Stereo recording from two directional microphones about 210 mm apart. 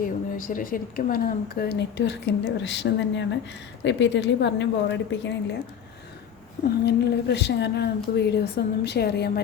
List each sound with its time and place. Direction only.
0.0 s a woman's voice: 40° left (ahead or behind); by 5.4 s 60° left (ahead or behind)
6.8 s speech: 50° left (ahead or behind)